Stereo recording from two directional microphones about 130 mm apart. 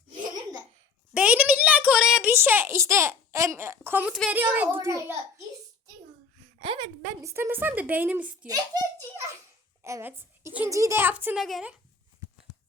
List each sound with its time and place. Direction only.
1.1 s a sound: 10° right (ahead or behind)
4.3 s a woman's voice: 10° right (ahead or behind)
6.6 s a woman's voice: 40° right (ahead or behind)
7.2 s a woman's voice: 20° right (ahead or behind)
8.4 s a child's voice: 30° right (ahead or behind)
11.3 s speech: centre (ahead or behind)